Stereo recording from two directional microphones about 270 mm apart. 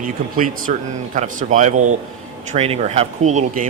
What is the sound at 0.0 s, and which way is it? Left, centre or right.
A man's voice, right.